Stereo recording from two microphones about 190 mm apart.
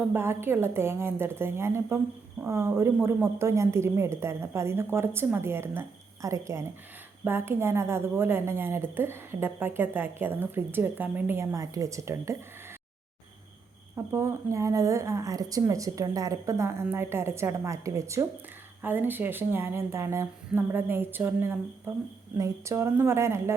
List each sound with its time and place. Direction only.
0.0 s a woman's voice: 10° right (ahead or behind)
13.9 s a woman's voice: 15° right (ahead or behind)